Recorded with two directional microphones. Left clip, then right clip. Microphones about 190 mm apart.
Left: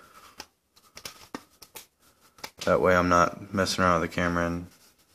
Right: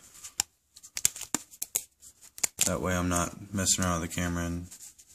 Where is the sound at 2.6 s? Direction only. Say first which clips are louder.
Left 12 dB; 40° right (ahead or behind).